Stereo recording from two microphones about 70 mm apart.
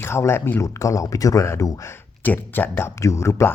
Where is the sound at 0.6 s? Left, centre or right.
Left.